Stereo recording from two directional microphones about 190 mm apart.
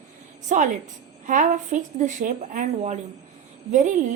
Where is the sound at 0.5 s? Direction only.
40° right (ahead or behind).